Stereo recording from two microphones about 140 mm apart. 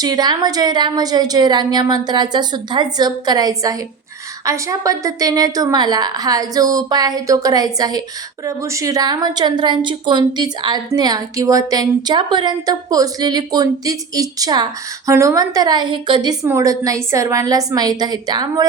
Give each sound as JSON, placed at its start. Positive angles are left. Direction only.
{"t": 0.0, "sound": "a woman's voice", "side_deg": -30}